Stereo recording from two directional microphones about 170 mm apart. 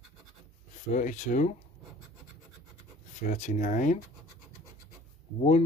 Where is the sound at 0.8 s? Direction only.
45° left (ahead or behind).